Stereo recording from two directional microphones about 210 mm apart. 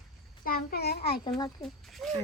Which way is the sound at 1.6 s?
Centre (ahead or behind).